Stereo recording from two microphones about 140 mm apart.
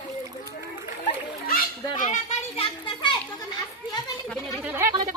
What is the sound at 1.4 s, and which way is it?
Children playing, 80° left.